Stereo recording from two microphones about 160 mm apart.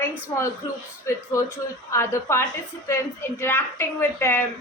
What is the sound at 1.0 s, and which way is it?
A woman's voice, 20° left (ahead or behind).